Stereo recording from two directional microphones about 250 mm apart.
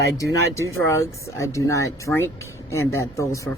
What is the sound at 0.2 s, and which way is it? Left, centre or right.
Speech, centre.